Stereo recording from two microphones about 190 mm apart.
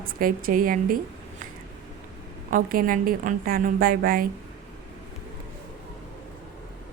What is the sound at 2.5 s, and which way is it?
A woman's voice, 45° right (ahead or behind).